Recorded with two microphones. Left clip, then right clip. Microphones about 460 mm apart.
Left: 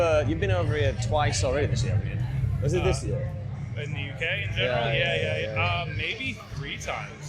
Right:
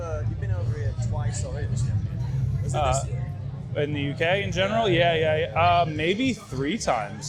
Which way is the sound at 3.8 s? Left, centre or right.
Right.